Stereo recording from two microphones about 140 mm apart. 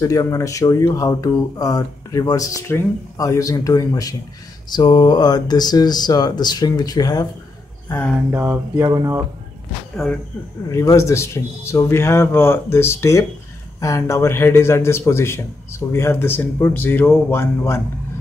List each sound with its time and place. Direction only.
0.0 s speech: 20° left (ahead or behind)
8.3 s mantra: 15° right (ahead or behind)
8.8 s speech: 25° right (ahead or behind)
10.0 s speech: centre (ahead or behind)
10.7 s a man's voice: 20° left (ahead or behind)